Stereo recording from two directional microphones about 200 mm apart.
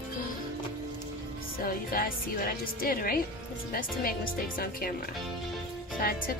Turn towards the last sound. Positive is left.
turn(degrees=45)  # may be behind; listen again after turning